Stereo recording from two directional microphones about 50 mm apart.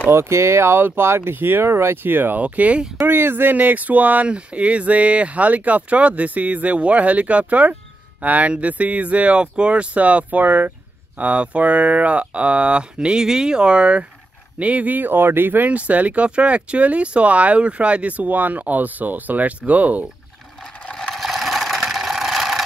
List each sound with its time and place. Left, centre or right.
0.1 s speech: right
2.0 s speech: right
2.4 s speech: right
3.1 s speech: right
21.1 s vehicle: centre